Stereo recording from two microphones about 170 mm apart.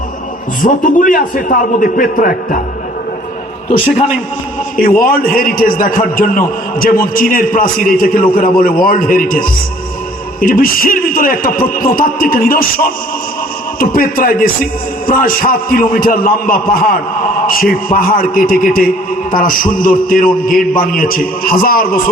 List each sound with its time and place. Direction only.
0.6 s a man's voice: 55° left (ahead or behind)
4.8 s a man's voice: 55° left (ahead or behind)